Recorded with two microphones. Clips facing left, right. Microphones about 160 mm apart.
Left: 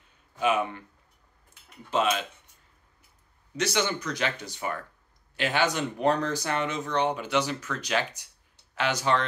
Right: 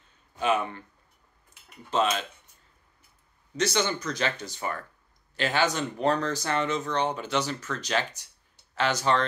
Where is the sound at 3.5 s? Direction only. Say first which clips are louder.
Right 1 dB; 15° left (ahead or behind).